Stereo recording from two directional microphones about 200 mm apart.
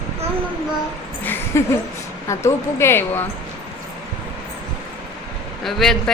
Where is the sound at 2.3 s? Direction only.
15° left (ahead or behind).